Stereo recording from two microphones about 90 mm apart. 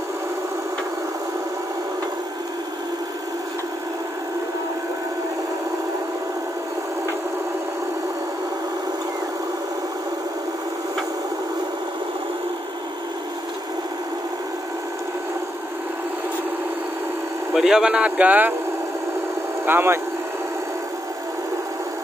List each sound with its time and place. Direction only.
17.6 s speech: 5° right (ahead or behind)
19.6 s speech: 25° right (ahead or behind)